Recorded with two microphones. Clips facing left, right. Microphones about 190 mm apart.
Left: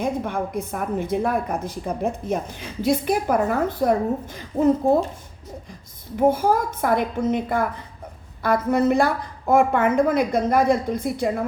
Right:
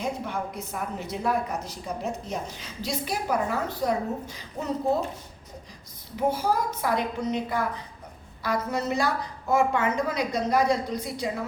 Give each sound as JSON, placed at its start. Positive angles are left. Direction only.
{"t": 0.0, "sound": "speech", "side_deg": 50}
{"t": 6.1, "sound": "speech", "side_deg": 50}